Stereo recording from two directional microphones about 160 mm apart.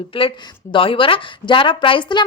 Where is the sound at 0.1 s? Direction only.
35° left (ahead or behind).